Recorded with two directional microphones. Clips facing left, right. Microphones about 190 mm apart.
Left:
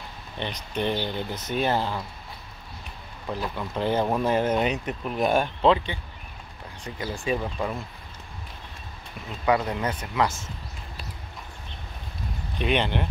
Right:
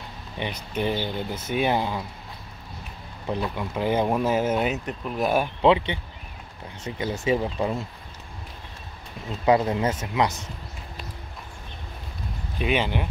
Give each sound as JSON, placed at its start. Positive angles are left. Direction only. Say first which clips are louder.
{"t": 0.4, "sound": "speech", "louder": "right 1 dB", "side_deg": -10}
{"t": 3.5, "sound": "speech", "louder": "even", "side_deg": -10}
{"t": 9.5, "sound": "speech", "louder": "right 3 dB", "side_deg": -25}
{"t": 12.5, "sound": "speech", "louder": "even", "side_deg": -5}